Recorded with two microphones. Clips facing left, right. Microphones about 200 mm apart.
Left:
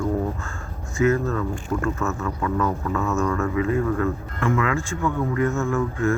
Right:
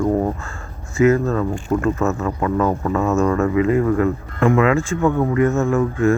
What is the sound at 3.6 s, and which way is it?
Speech, 80° right.